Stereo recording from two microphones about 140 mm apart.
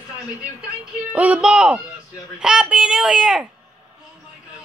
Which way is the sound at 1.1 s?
10° right (ahead or behind).